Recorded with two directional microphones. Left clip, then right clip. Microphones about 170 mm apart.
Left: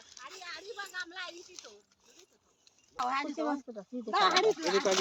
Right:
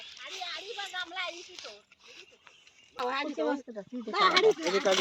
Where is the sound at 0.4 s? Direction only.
30° left (ahead or behind).